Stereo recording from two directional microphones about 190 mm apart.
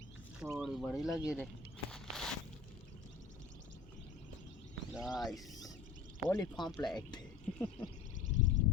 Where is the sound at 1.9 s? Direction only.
5° left (ahead or behind).